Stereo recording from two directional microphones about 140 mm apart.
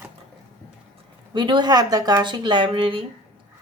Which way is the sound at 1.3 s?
35° right (ahead or behind).